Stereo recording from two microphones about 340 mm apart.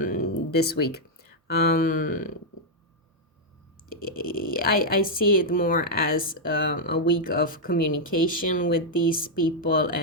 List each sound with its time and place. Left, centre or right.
0.0 s a sound: left
1.8 s a woman's voice: left
4.0 s a woman's voice: left